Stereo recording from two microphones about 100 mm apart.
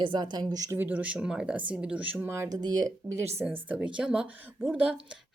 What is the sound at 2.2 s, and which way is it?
Speech, 25° right (ahead or behind).